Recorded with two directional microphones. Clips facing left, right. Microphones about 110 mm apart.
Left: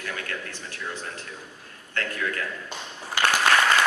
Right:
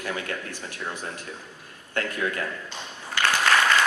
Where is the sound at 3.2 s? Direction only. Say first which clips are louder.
Left 1 dB; 15° left (ahead or behind).